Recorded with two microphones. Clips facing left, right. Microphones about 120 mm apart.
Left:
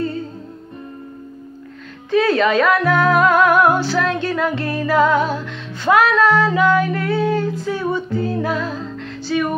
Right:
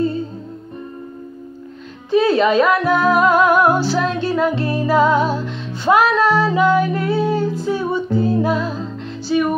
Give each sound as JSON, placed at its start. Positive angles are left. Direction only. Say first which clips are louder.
{"t": 2.0, "sound": "speech", "louder": "right 1 dB", "side_deg": -20}
{"t": 3.2, "sound": "music", "louder": "even", "side_deg": -25}